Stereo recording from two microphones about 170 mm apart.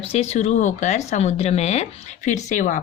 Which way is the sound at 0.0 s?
40° left (ahead or behind).